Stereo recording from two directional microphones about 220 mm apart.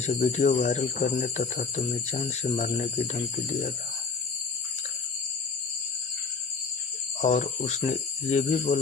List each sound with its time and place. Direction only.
0.0 s speech: 35° left (ahead or behind)
7.2 s speech: 30° left (ahead or behind)